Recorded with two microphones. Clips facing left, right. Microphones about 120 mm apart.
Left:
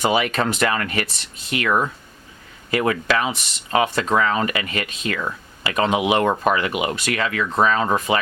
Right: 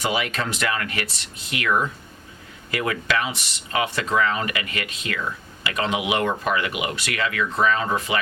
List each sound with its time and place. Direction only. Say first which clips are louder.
0.0 s speech: left 5 dB; 50° left (ahead or behind)